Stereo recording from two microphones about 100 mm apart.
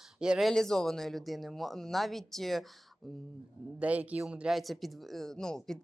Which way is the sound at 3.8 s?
15° right (ahead or behind).